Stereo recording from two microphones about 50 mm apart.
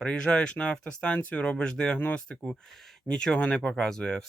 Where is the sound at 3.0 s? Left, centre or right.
Centre.